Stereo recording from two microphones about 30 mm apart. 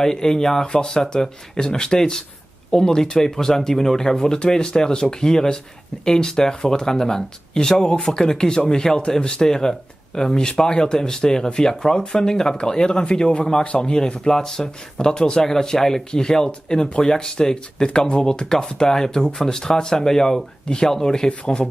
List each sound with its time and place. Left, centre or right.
0.0 s speech: left
21.3 s speech: left